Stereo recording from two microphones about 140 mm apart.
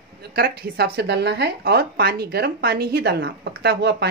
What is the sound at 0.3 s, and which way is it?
A woman's voice, 90° right.